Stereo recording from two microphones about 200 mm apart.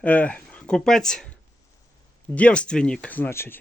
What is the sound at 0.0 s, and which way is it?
Speech, 5° left (ahead or behind).